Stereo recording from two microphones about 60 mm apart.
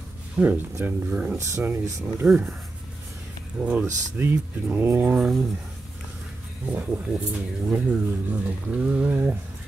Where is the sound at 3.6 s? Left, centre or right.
Right.